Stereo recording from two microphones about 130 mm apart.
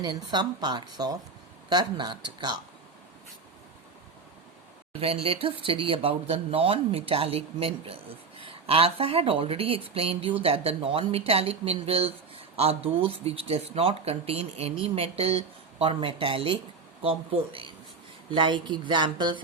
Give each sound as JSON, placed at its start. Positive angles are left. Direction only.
{"t": 0.3, "sound": "speech", "side_deg": -35}
{"t": 4.9, "sound": "speech", "side_deg": -50}